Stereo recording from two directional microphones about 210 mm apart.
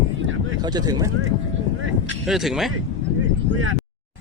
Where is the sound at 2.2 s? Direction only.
Centre (ahead or behind).